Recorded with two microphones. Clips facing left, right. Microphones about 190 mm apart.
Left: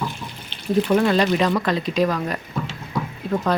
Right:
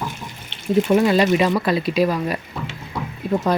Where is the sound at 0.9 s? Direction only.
10° right (ahead or behind).